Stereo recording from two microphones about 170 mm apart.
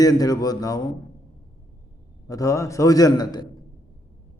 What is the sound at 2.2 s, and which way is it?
A man's voice, 20° left (ahead or behind).